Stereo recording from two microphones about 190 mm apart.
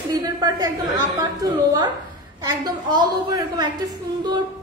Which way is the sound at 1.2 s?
20° right (ahead or behind).